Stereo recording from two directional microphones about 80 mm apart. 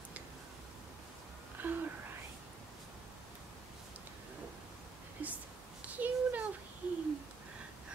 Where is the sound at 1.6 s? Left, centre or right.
Right.